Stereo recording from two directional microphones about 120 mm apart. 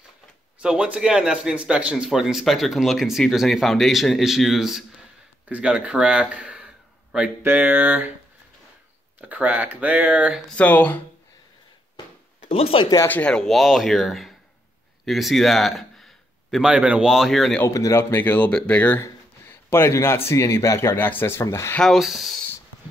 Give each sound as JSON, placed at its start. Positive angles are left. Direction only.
{"t": 0.6, "sound": "a man's voice", "side_deg": -10}
{"t": 9.3, "sound": "speech", "side_deg": -15}
{"t": 10.5, "sound": "speech", "side_deg": 15}
{"t": 12.4, "sound": "speech", "side_deg": 50}
{"t": 12.9, "sound": "speech", "side_deg": 20}
{"t": 13.2, "sound": "a man's voice", "side_deg": 5}
{"t": 17.6, "sound": "speech", "side_deg": 25}
{"t": 21.7, "sound": "a man's voice", "side_deg": 0}